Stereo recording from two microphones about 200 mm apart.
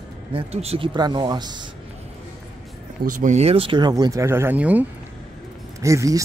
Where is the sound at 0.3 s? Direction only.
30° right (ahead or behind).